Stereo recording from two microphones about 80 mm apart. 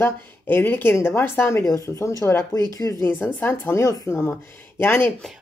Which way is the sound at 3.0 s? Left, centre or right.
Left.